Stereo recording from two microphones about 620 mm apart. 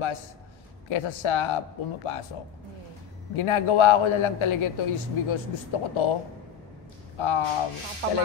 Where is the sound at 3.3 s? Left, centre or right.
Left.